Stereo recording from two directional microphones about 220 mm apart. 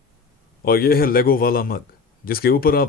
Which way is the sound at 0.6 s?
45° left (ahead or behind).